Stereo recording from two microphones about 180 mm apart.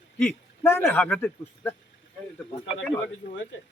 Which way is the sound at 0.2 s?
10° left (ahead or behind).